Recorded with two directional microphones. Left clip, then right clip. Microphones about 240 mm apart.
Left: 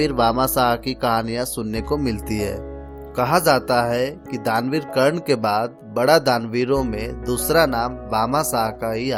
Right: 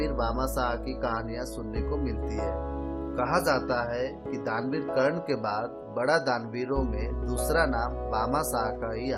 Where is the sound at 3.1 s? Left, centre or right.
Left.